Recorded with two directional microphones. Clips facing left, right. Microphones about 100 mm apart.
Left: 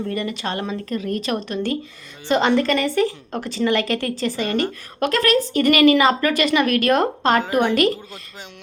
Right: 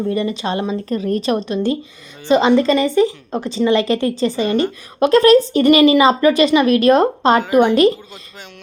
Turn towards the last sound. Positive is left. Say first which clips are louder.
# right 6 dB
turn(degrees=-25)  # may be behind; listen again after turning